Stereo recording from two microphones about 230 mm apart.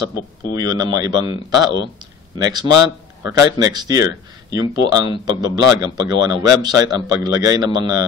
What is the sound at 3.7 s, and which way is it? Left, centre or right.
Speech, centre.